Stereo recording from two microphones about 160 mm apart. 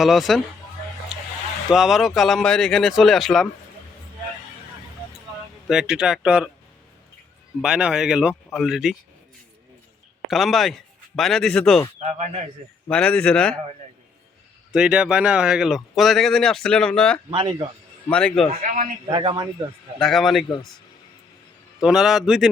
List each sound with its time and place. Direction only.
0.0 s speech: centre (ahead or behind)
1.7 s speech: centre (ahead or behind)
5.6 s speech: 5° right (ahead or behind)
7.6 s speech: 5° right (ahead or behind)
10.2 s speech: centre (ahead or behind)
12.9 s speech: 5° left (ahead or behind)
14.7 s speech: 5° right (ahead or behind)
17.3 s speech: 30° right (ahead or behind)
18.1 s speech: 5° left (ahead or behind)
18.6 s a man's voice: 55° right (ahead or behind)
19.0 s speech: 30° right (ahead or behind)
20.0 s speech: centre (ahead or behind)
21.8 s speech: 5° right (ahead or behind)